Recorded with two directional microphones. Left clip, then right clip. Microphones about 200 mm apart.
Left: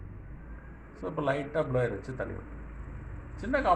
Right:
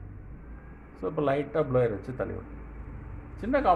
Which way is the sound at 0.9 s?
45° right (ahead or behind).